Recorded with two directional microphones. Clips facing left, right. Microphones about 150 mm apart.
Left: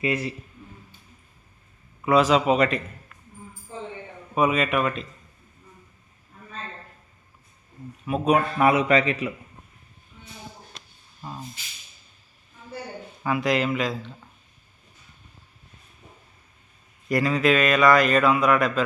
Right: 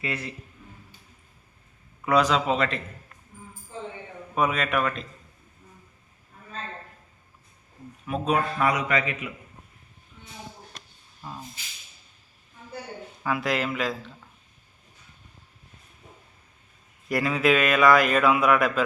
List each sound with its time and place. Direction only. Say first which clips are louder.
2.0 s a man's voice: left 3 dB; 5° left (ahead or behind)
4.4 s a man's voice: left 3 dB; 5° left (ahead or behind)
8.0 s a man's voice: left 4 dB; 10° left (ahead or behind); by 9.3 s 30° left (ahead or behind)
13.2 s speech: left 3 dB; centre (ahead or behind)
17.1 s speech: left 2 dB; 5° right (ahead or behind)